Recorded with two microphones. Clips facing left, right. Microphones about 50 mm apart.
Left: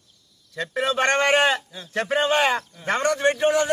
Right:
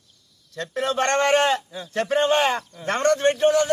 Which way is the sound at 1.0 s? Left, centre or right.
Centre.